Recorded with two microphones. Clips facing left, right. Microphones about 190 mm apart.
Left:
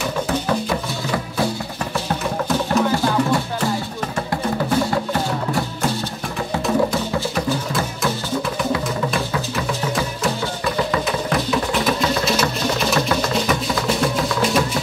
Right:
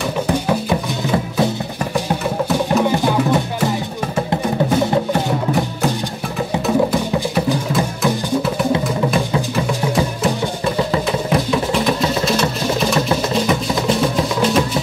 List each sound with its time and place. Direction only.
0.3 s music: 15° right (ahead or behind)
2.0 s music: 15° right (ahead or behind)